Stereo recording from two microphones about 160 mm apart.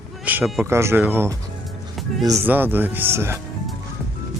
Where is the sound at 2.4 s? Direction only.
10° right (ahead or behind).